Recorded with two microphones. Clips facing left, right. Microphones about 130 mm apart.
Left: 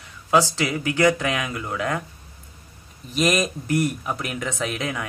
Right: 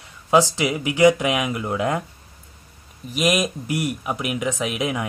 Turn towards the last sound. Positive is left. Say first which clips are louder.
# right 3 dB
turn(degrees=-15)  # may be behind; listen again after turning